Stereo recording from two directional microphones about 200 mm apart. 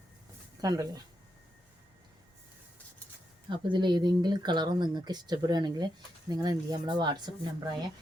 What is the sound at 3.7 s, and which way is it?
A woman's voice, 20° right (ahead or behind).